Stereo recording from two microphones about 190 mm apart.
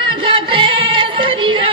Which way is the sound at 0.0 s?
25° right (ahead or behind).